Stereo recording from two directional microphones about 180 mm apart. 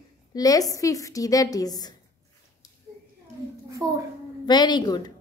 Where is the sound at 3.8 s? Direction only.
20° right (ahead or behind).